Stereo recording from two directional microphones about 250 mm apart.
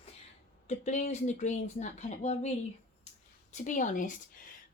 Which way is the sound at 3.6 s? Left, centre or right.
Left.